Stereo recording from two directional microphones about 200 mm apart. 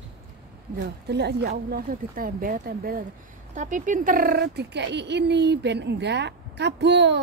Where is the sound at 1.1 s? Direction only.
55° right (ahead or behind).